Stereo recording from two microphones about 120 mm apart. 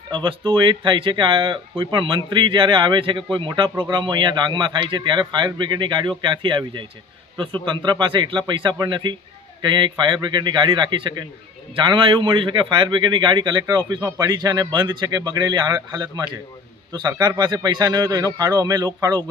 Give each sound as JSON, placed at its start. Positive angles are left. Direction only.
{"t": 0.1, "sound": "speech", "side_deg": -40}